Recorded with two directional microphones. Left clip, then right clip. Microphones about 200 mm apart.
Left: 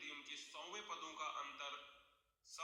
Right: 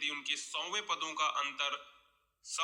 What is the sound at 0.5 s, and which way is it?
A man's voice, 35° right (ahead or behind).